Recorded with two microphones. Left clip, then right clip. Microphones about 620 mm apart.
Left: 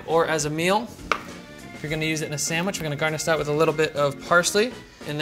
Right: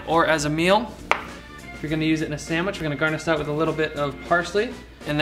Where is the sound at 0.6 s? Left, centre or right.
Right.